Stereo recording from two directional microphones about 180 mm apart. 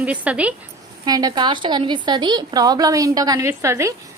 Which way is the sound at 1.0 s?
20° right (ahead or behind).